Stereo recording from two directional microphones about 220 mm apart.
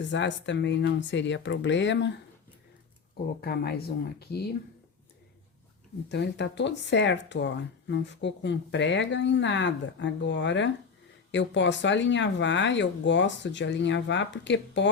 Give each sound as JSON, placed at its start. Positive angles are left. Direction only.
{"t": 0.0, "sound": "speech", "side_deg": 55}
{"t": 3.4, "sound": "speech", "side_deg": 45}
{"t": 6.1, "sound": "speech", "side_deg": 50}